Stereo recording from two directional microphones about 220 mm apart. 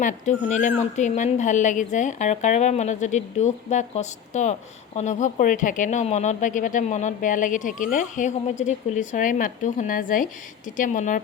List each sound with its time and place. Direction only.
0.0 s speech: 35° left (ahead or behind)